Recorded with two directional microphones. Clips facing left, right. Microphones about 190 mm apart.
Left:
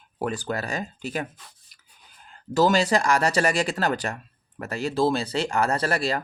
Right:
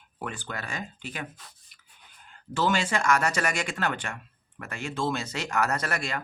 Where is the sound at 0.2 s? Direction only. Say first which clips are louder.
Left 8 dB; 40° left (ahead or behind).